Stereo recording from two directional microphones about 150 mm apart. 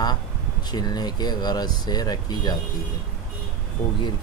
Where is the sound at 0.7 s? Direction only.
25° left (ahead or behind).